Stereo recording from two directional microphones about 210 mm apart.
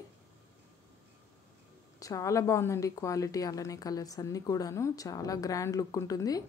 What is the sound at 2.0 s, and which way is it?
A woman's voice, 15° left (ahead or behind).